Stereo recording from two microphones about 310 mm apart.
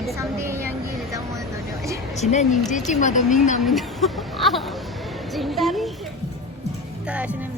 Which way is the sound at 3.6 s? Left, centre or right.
Centre.